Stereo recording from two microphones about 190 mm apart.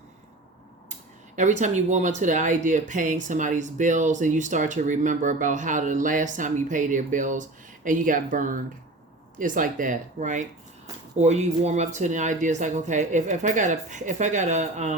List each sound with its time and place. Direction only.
1.4 s speech: 40° right (ahead or behind)